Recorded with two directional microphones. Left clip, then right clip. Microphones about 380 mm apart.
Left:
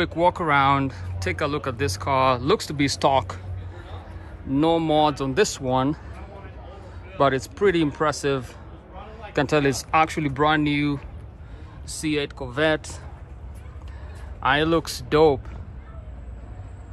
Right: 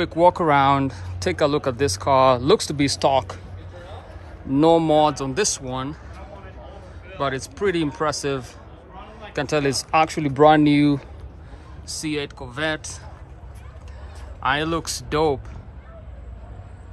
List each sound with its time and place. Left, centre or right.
0.0 s speech: centre
4.5 s speech: centre
7.2 s speech: centre
14.4 s speech: centre